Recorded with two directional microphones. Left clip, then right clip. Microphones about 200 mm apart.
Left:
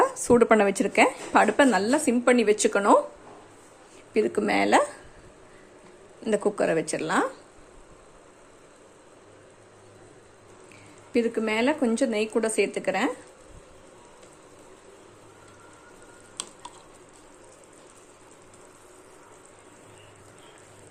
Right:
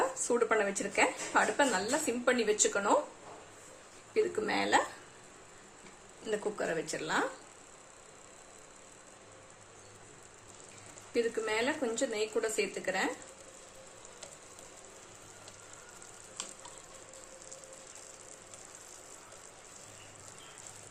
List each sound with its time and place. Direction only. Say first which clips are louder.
0.3 s a woman's voice: left 11 dB; 40° left (ahead or behind)
4.1 s a woman's voice: left 7 dB; 40° left (ahead or behind)
6.2 s a woman's voice: left 10 dB; 35° left (ahead or behind)
11.1 s a woman's voice: left 7 dB; 40° left (ahead or behind)
16.4 s frying: left 6 dB; 55° left (ahead or behind)